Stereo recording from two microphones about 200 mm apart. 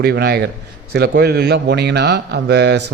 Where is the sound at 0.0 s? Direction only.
55° right (ahead or behind).